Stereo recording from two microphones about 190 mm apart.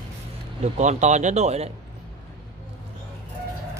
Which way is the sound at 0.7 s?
40° right (ahead or behind).